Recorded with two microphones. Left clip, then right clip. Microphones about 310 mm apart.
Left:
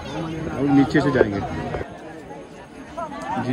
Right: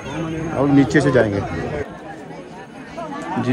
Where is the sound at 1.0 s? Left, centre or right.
Right.